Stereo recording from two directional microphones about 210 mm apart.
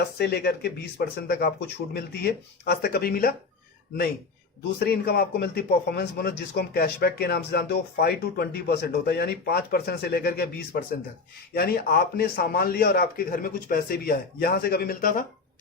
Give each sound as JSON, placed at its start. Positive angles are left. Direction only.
{"t": 0.2, "sound": "a man's voice", "side_deg": 50}
{"t": 4.8, "sound": "a man's voice", "side_deg": 45}